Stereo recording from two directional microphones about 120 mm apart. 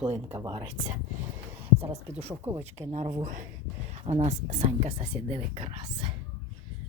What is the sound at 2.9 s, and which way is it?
Speech, 70° right (ahead or behind).